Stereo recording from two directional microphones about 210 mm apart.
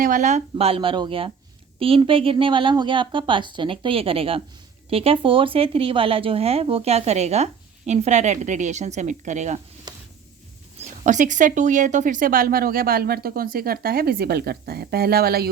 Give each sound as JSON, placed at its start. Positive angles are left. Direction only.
{"t": 0.0, "sound": "speech", "side_deg": -35}
{"t": 9.9, "sound": "a sound", "side_deg": -20}
{"t": 11.0, "sound": "speech", "side_deg": -35}